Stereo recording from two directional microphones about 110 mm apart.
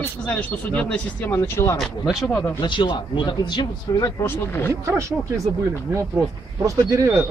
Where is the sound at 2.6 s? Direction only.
45° left (ahead or behind).